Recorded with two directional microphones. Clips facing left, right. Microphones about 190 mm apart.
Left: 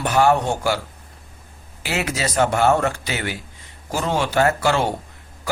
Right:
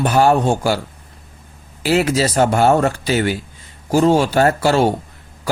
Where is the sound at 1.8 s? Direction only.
30° right (ahead or behind).